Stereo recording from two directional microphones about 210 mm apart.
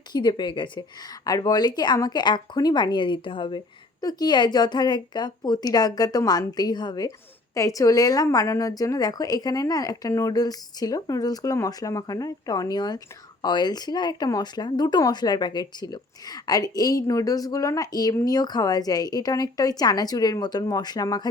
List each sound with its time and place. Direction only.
0.1 s a woman's voice: 20° left (ahead or behind)